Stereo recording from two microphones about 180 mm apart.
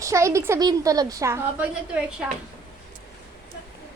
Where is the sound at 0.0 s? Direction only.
15° right (ahead or behind).